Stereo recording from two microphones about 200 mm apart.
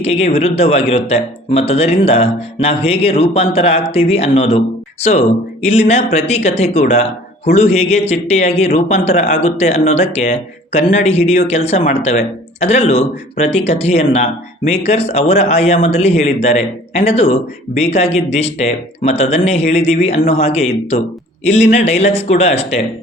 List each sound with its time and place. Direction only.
0.0 s speech: 30° left (ahead or behind)